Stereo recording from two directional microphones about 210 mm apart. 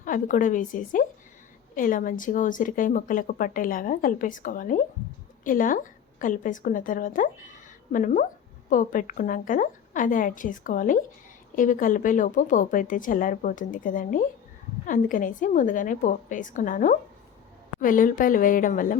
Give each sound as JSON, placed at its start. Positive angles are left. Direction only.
{"t": 0.0, "sound": "speech", "side_deg": 40}